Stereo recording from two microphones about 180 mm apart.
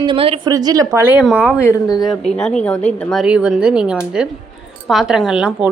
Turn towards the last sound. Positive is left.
turn(degrees=-5)  # may be behind; listen again after turning